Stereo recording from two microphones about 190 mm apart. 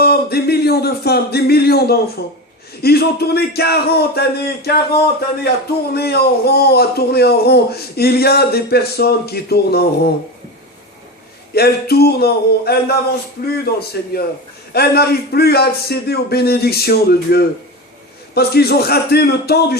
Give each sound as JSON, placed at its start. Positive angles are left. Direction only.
{"t": 0.0, "sound": "speech", "side_deg": 55}
{"t": 11.5, "sound": "a man's voice", "side_deg": 55}